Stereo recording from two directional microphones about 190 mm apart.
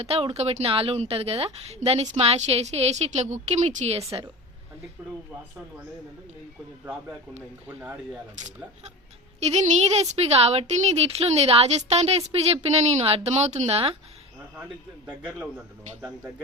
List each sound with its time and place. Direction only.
0.0 s a woman's voice: 30° right (ahead or behind)
7.8 s a man's voice: 10° right (ahead or behind)
9.5 s a woman's voice: 35° right (ahead or behind)
15.4 s a man's voice: 10° right (ahead or behind)